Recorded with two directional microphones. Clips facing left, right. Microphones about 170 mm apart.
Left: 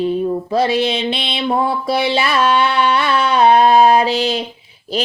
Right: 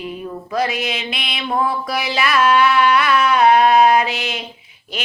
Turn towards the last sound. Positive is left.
turn(degrees=30)  # may be behind; listen again after turning